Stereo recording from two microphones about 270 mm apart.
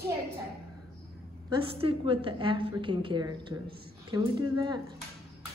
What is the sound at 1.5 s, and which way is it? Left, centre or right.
A woman's voice, centre.